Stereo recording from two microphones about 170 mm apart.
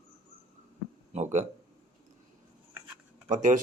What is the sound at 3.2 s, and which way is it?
Speech, 50° right (ahead or behind).